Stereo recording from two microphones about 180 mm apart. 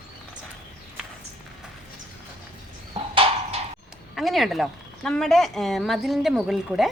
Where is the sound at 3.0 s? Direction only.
35° right (ahead or behind).